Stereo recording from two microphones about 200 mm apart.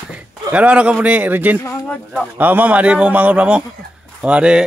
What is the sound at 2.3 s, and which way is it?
Speech, 10° right (ahead or behind).